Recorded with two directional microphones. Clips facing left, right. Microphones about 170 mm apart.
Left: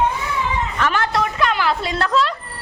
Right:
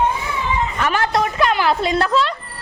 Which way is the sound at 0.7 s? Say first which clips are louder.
Right 1 dB; 10° right (ahead or behind).